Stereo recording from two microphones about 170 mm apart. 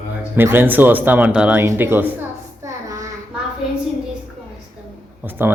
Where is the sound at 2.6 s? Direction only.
20° right (ahead or behind).